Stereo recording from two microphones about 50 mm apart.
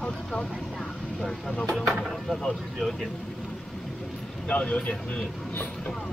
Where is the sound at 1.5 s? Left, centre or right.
Left.